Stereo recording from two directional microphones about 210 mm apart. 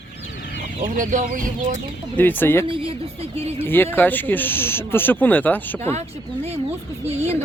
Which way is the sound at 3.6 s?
10° left (ahead or behind).